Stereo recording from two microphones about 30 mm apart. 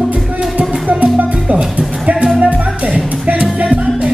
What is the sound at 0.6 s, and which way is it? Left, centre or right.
Music, right.